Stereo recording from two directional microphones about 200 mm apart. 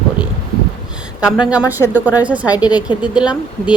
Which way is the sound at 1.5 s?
5° right (ahead or behind).